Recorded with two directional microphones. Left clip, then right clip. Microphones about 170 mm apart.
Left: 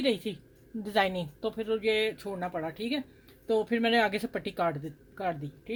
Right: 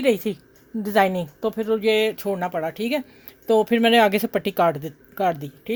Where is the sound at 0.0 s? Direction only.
50° right (ahead or behind); by 3.0 s 70° right (ahead or behind).